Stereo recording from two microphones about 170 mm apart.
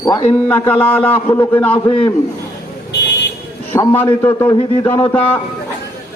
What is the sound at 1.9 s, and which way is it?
Speech, 30° left (ahead or behind).